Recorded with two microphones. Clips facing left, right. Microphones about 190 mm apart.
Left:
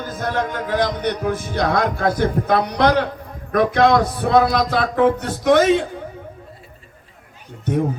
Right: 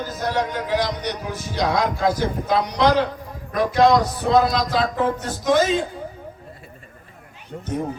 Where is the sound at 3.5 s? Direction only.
55° left (ahead or behind).